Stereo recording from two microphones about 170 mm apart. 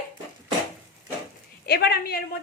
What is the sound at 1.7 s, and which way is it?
Speech, 70° left (ahead or behind).